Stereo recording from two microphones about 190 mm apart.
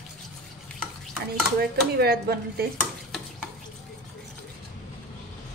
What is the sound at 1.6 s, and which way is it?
Speech, 55° right (ahead or behind).